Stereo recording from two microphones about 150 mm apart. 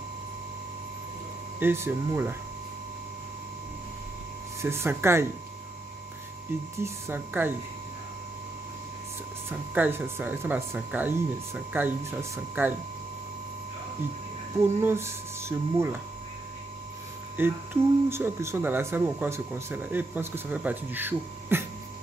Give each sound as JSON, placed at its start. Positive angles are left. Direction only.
{"t": 1.6, "sound": "speech", "side_deg": -15}
{"t": 4.6, "sound": "speech", "side_deg": -15}
{"t": 6.8, "sound": "speech", "side_deg": -15}
{"t": 9.5, "sound": "speech", "side_deg": -15}
{"t": 14.6, "sound": "speech", "side_deg": -15}
{"t": 17.4, "sound": "speech", "side_deg": -15}